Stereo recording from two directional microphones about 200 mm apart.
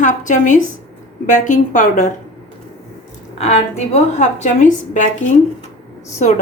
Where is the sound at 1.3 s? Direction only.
40° left (ahead or behind).